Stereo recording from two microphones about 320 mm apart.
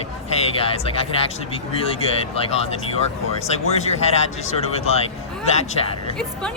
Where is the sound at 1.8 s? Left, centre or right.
Centre.